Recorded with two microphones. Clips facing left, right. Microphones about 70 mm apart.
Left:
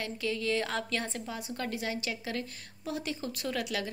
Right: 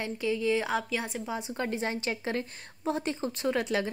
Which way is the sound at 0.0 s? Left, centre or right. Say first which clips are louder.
Right 4 dB; right.